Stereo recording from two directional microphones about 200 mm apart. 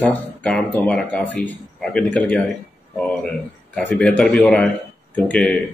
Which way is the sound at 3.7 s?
5° left (ahead or behind).